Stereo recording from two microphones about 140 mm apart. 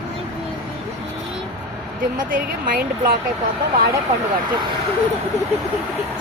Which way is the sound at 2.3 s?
80° right.